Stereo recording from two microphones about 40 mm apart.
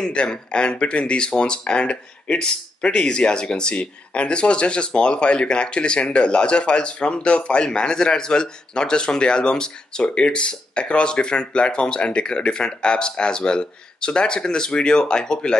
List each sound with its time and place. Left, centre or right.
0.0 s speech: left